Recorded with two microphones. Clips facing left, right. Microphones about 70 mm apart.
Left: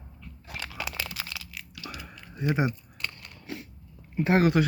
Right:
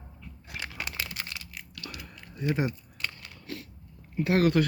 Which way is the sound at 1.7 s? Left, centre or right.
Centre.